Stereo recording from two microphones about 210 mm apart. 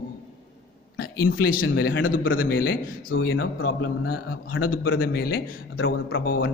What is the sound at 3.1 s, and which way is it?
A man's voice, 65° left (ahead or behind).